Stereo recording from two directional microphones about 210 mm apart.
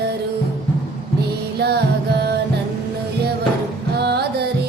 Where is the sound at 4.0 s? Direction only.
50° right (ahead or behind).